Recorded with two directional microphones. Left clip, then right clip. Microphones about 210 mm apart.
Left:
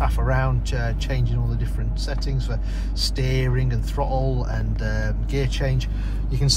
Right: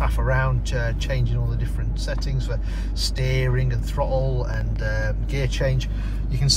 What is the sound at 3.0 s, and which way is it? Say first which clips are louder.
Speech: even; 10° left (ahead or behind).